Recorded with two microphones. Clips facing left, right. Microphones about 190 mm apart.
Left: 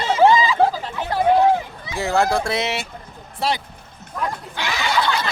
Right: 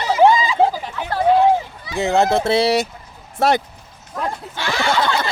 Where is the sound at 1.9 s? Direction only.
20° right (ahead or behind); by 2.8 s 35° right (ahead or behind).